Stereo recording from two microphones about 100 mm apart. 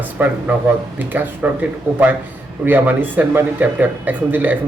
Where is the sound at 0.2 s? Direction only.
20° right (ahead or behind).